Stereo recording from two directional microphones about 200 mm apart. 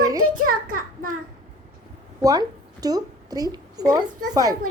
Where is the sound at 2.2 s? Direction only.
20° right (ahead or behind).